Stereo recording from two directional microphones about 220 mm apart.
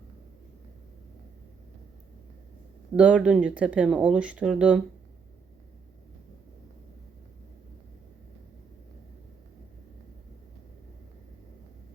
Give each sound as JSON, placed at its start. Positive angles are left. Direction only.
{"t": 2.9, "sound": "speech", "side_deg": -5}